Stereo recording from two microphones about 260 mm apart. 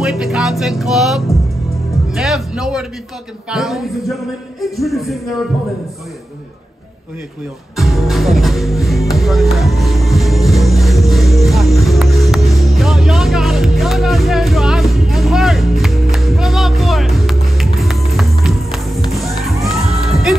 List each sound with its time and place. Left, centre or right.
0.0 s music: centre
2.0 s speech: centre
3.4 s music: centre
7.7 s music: centre